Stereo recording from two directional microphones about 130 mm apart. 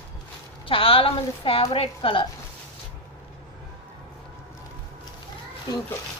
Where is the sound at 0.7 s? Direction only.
45° left (ahead or behind).